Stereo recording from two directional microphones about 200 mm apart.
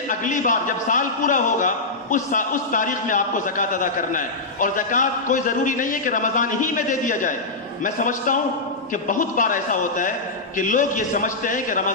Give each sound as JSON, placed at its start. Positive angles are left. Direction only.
{"t": 0.2, "sound": "a man's voice", "side_deg": 40}